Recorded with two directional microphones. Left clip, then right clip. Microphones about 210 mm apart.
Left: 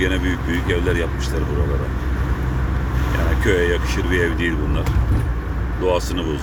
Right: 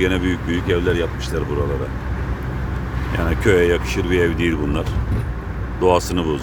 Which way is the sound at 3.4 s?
30° right (ahead or behind).